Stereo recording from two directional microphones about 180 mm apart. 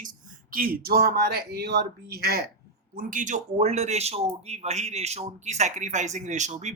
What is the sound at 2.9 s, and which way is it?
A man's voice, 45° right (ahead or behind).